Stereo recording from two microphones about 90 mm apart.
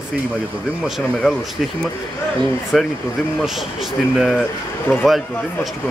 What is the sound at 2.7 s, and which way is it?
Speech, centre (ahead or behind).